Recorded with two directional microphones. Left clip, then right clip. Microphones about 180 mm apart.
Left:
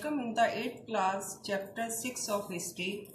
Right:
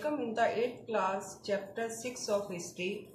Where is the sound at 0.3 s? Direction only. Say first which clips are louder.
Left 2 dB; 25° right (ahead or behind).